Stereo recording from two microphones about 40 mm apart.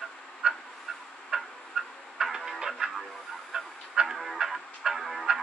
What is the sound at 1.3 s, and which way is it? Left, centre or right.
Tick-tock, centre.